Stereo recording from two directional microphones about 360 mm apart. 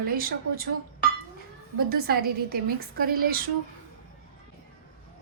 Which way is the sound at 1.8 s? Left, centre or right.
Right.